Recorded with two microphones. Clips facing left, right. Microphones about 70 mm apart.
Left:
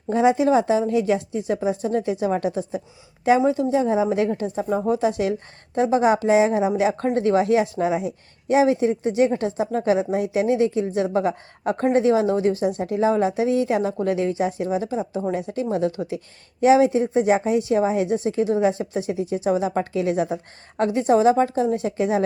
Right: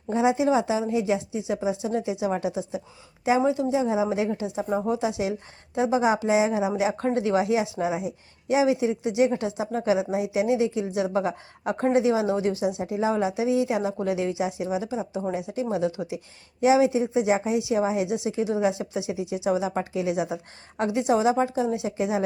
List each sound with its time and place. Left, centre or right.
0.1 s a woman's voice: left